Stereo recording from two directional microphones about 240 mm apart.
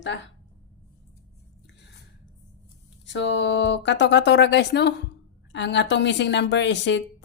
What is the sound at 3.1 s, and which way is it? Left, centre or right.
A woman's voice, left.